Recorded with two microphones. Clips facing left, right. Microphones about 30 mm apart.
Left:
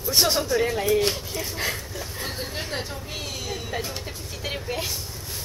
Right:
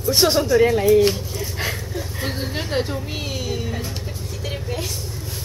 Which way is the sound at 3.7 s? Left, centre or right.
Centre.